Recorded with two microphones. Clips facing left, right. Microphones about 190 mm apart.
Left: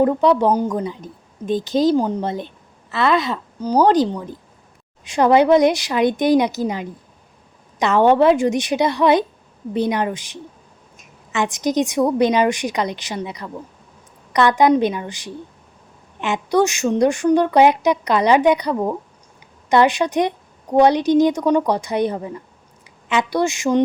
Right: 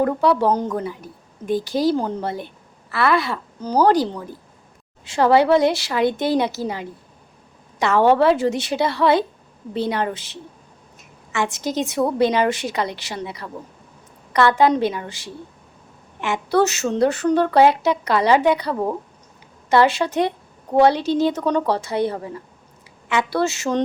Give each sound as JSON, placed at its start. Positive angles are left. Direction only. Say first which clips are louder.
{"t": 0.0, "sound": "a woman's voice", "louder": "left 3 dB", "side_deg": 20}